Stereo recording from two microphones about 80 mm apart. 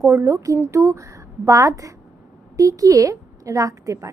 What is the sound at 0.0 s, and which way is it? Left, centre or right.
Speech, right.